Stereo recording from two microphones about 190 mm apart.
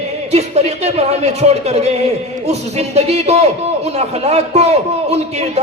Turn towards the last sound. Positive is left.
turn(degrees=-35)  # may be behind; listen again after turning